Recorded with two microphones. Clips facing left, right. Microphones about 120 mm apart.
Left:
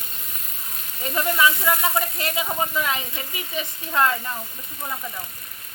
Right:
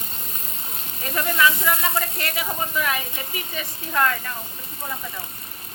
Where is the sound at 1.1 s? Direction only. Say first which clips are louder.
Even; 20° left (ahead or behind).